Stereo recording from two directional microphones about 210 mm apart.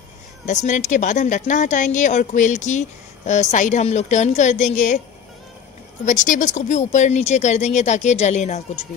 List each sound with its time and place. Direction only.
0.5 s speech: 35° left (ahead or behind)
6.0 s speech: 40° left (ahead or behind)